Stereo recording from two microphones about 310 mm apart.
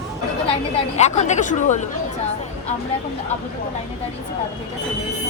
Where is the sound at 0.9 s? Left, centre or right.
Left.